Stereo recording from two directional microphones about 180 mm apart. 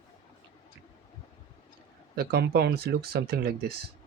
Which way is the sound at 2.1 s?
60° right (ahead or behind).